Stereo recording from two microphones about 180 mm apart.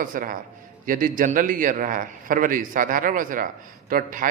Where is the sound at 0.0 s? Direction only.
50° right (ahead or behind).